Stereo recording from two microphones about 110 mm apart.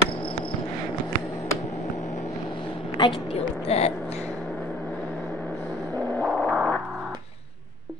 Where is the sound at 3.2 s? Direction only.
70° left (ahead or behind).